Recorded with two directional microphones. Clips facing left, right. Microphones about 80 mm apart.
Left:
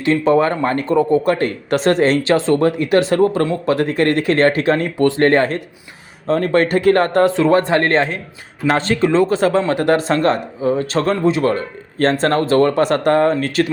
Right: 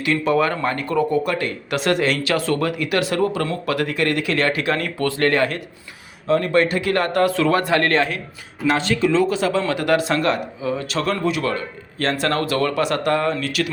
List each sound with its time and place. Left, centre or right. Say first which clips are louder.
0.0 s speech: left 5 dB; left
8.6 s speech: left 3 dB; left